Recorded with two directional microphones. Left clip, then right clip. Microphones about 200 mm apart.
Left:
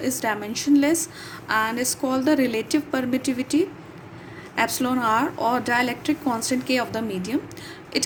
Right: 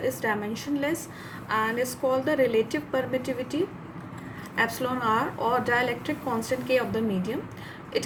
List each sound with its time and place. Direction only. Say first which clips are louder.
0.1 s a woman's voice: left 2 dB; 40° left (ahead or behind)